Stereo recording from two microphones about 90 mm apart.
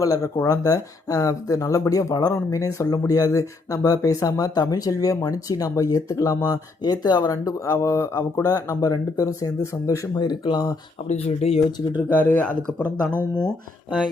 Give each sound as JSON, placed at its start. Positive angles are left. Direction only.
{"t": 0.0, "sound": "speech", "side_deg": 40}
{"t": 10.2, "sound": "speech", "side_deg": 55}
{"t": 11.3, "sound": "speech", "side_deg": 90}
{"t": 12.0, "sound": "speech", "side_deg": 15}